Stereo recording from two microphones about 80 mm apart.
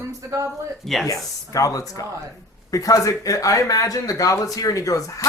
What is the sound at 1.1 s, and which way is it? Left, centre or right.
Speech, left.